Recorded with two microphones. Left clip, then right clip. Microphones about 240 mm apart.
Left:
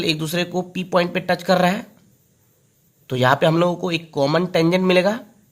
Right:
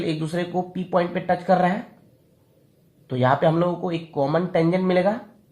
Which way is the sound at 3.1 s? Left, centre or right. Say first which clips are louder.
Left 3 dB; left.